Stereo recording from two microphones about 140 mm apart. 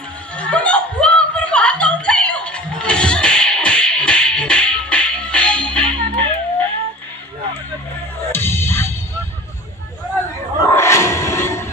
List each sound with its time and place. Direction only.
0.4 s chuckle: 10° left (ahead or behind)
6.1 s music: 10° left (ahead or behind)
8.3 s music: 15° left (ahead or behind)
10.7 s a sound: 20° left (ahead or behind)